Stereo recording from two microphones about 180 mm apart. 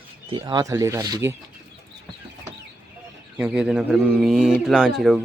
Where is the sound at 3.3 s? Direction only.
5° right (ahead or behind).